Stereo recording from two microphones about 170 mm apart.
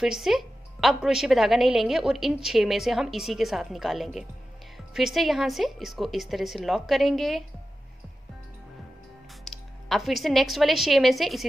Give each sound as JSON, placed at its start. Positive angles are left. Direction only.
{"t": 0.0, "sound": "a woman's voice", "side_deg": 0}
{"t": 9.4, "sound": "speech", "side_deg": 0}